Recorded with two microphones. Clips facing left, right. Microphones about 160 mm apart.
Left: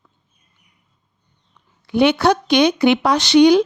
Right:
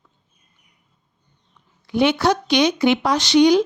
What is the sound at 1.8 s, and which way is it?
A woman's voice, 65° left (ahead or behind).